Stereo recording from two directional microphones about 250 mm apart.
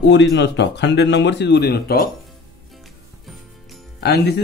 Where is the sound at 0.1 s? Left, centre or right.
Left.